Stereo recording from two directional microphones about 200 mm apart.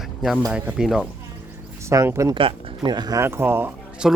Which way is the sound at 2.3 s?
25° right (ahead or behind).